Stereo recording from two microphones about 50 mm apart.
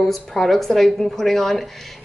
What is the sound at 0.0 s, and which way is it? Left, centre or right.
A woman's voice, centre.